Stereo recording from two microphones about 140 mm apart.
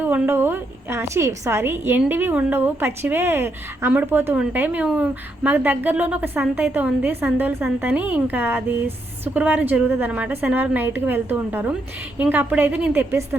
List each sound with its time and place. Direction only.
0.0 s a woman's voice: 15° right (ahead or behind)